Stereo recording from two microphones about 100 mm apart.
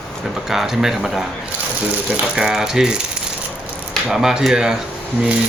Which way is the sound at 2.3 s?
5° right (ahead or behind).